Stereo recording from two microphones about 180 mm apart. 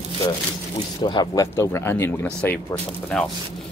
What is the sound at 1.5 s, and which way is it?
Speech, 15° left (ahead or behind).